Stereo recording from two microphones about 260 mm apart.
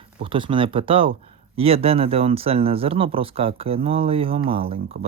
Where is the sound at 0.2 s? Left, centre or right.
Centre.